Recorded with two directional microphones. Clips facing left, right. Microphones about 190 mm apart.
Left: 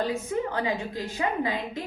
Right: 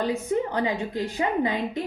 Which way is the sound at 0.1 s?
20° right (ahead or behind).